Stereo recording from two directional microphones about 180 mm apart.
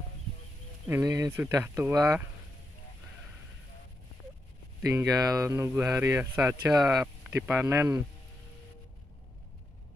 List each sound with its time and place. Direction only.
0.8 s speech: 15° right (ahead or behind)
4.9 s speech: 20° right (ahead or behind)